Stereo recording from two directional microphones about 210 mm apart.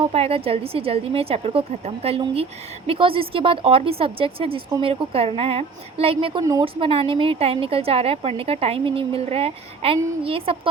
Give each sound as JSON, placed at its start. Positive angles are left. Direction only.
{"t": 0.0, "sound": "a woman's voice", "side_deg": -30}